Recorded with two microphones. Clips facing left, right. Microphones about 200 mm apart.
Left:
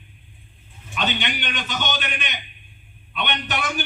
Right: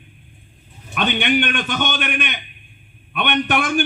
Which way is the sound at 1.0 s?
55° right (ahead or behind).